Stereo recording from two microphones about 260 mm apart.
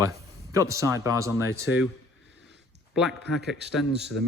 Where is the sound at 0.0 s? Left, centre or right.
Centre.